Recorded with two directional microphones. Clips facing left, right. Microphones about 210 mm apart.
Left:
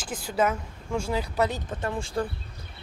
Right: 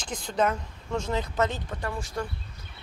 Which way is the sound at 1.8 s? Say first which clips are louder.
Left 5 dB; 25° left (ahead or behind).